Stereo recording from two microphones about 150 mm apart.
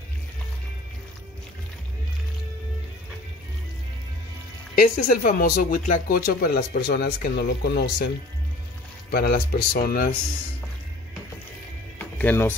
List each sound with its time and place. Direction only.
4.7 s speech: 75° left (ahead or behind); by 7.9 s 90° left
9.1 s speech: 90° left
12.2 s speech: 15° left (ahead or behind)